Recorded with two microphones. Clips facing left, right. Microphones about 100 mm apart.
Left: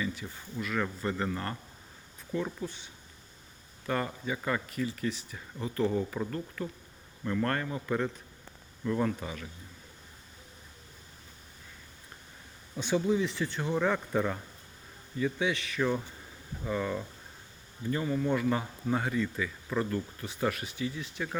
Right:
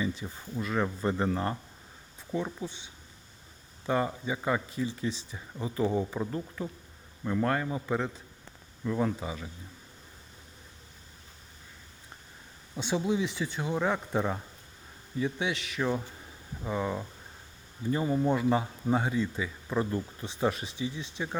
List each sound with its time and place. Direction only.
0.0 s speech: 25° right (ahead or behind)
2.3 s speech: 15° right (ahead or behind)
3.8 s speech: 15° right (ahead or behind)
5.5 s speech: 15° right (ahead or behind)
12.7 s speech: 20° right (ahead or behind)
17.9 s speech: 25° right (ahead or behind)